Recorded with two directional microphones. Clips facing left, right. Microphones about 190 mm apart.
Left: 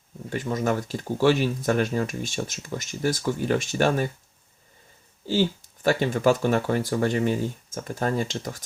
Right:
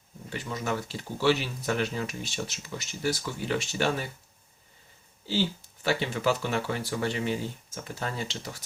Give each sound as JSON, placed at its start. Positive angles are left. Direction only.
{"t": 0.3, "sound": "speech", "side_deg": 45}
{"t": 5.3, "sound": "speech", "side_deg": 50}